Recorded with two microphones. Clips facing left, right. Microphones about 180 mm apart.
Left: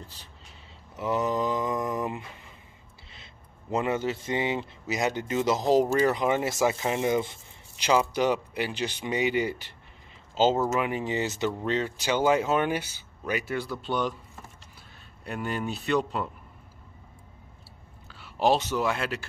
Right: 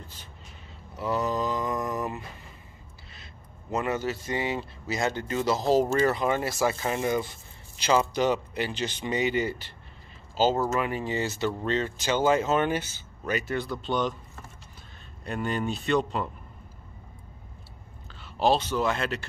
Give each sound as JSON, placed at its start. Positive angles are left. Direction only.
{"t": 0.9, "sound": "mantra", "side_deg": 20}
{"t": 3.7, "sound": "speech", "side_deg": 20}
{"t": 18.2, "sound": "speech", "side_deg": 15}